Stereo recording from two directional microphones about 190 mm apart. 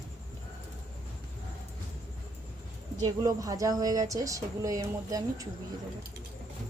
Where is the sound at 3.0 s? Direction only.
20° right (ahead or behind).